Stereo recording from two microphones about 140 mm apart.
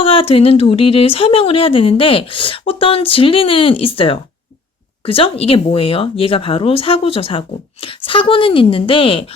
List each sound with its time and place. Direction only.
0.0 s speech: 40° left (ahead or behind)